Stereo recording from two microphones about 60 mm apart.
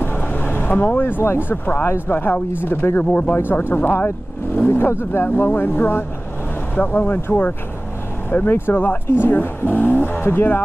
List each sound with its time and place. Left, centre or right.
0.0 s speech: left
3.0 s speech: left
4.6 s speech: left
8.5 s speech: left